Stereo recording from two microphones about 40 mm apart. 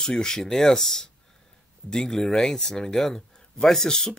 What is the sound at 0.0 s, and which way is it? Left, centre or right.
Speech, centre.